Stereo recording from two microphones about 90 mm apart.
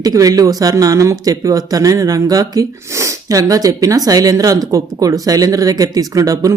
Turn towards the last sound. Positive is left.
turn(degrees=-40)  # may be behind; listen again after turning